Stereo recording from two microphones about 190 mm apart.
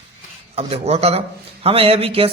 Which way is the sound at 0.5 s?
35° right (ahead or behind).